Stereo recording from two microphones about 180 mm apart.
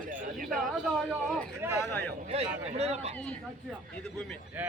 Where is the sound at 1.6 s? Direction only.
10° right (ahead or behind).